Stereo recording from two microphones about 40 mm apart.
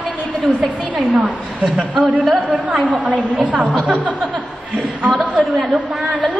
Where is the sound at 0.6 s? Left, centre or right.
Right.